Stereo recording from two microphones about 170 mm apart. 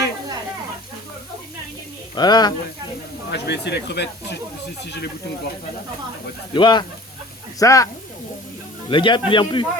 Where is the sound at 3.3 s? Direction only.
85° left.